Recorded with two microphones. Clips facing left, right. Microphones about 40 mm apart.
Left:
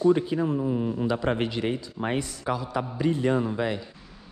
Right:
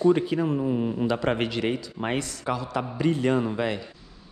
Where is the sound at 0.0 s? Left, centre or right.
Right.